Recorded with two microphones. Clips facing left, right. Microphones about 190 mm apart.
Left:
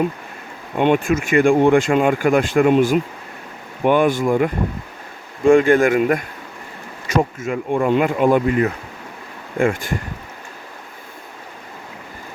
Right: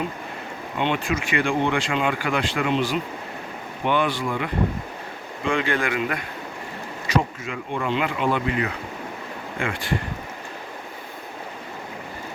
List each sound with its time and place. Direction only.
0.8 s speech: 50° left (ahead or behind)